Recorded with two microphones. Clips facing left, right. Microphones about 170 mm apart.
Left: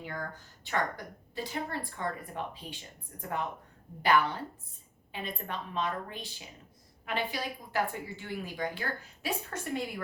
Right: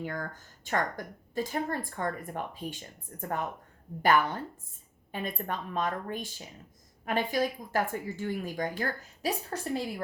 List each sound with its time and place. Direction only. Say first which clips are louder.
0.0 s a woman's voice: right 3 dB; 45° right (ahead or behind)